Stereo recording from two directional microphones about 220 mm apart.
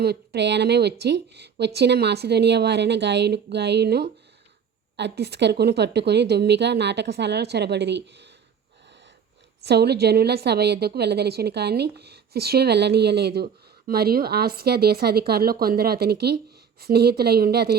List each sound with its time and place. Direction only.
0.0 s a woman's voice: 45° right (ahead or behind)
9.6 s a woman's voice: 50° right (ahead or behind)